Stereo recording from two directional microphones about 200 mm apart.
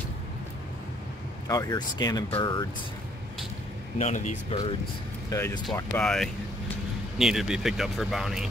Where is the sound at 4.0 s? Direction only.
35° left (ahead or behind).